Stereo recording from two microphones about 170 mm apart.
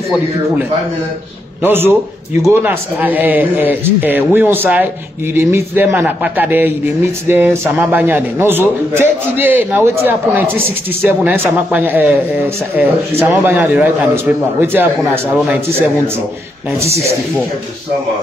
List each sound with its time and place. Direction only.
1.6 s a man's voice: 15° right (ahead or behind)
16.8 s speech: 35° right (ahead or behind)